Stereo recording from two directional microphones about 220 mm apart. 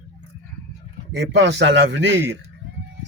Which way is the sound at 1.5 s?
50° right (ahead or behind).